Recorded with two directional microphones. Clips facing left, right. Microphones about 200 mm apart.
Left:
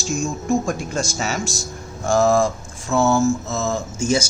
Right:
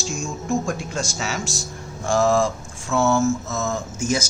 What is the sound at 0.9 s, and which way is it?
Speech, 45° left (ahead or behind).